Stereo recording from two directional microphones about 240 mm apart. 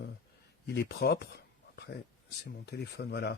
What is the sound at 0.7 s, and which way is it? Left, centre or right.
Speech, left.